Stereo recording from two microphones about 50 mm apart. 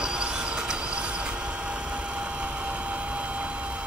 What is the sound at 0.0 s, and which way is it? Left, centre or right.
Vehicle, centre.